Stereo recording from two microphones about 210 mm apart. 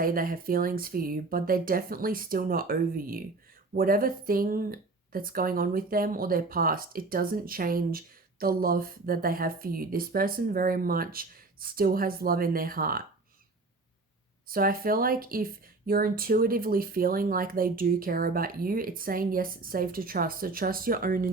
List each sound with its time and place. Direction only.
0.0 s speech: 40° right (ahead or behind)
14.4 s speech: 45° right (ahead or behind)